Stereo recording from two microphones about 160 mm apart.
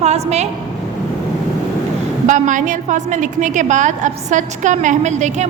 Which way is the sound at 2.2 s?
50° right (ahead or behind).